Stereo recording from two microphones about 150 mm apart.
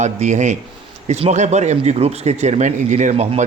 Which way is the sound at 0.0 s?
50° right (ahead or behind).